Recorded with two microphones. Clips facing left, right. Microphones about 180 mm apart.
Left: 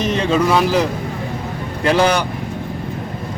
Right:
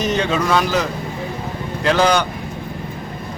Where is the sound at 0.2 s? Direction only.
Centre (ahead or behind).